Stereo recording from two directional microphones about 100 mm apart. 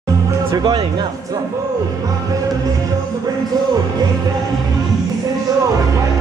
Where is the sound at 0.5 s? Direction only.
45° right (ahead or behind).